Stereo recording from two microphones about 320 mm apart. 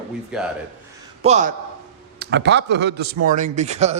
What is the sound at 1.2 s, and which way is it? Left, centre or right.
Speech, right.